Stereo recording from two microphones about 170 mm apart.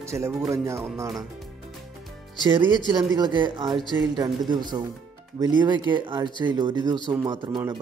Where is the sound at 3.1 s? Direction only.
25° right (ahead or behind).